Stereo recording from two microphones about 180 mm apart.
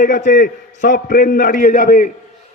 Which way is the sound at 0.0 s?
45° left (ahead or behind).